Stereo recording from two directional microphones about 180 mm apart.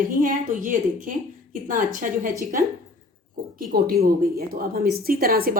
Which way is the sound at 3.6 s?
55° right (ahead or behind).